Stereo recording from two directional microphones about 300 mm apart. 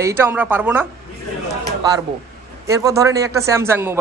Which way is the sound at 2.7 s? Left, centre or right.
Centre.